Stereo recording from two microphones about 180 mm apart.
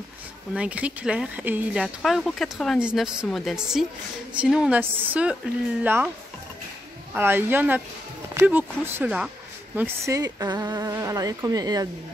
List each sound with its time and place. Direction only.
0.6 s a woman's voice: 5° right (ahead or behind)
7.2 s a woman's voice: 10° right (ahead or behind)
9.8 s speech: 15° right (ahead or behind)